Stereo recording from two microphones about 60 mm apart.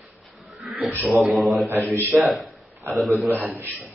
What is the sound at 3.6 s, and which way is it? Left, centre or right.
Speech, right.